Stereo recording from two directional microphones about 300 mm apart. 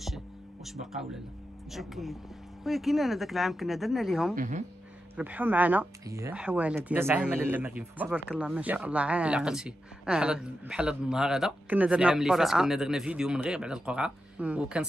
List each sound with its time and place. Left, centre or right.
0.7 s speech: centre
4.4 s speech: right
5.1 s speech: centre